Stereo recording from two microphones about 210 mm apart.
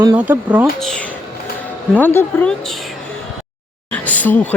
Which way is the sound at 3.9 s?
5° left (ahead or behind).